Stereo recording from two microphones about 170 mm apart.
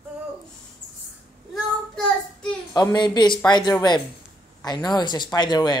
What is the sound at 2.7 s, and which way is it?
A woman's voice, 25° left (ahead or behind).